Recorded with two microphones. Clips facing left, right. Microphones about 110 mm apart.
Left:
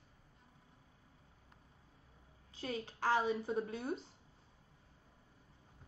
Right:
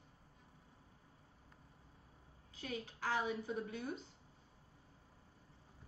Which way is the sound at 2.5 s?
35° left (ahead or behind).